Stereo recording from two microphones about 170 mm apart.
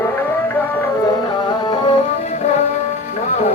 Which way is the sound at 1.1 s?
25° left (ahead or behind).